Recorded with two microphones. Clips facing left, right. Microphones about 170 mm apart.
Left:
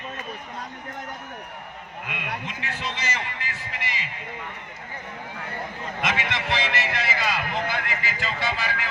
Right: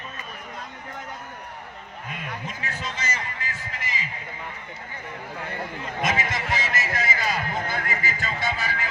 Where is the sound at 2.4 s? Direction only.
45° right (ahead or behind).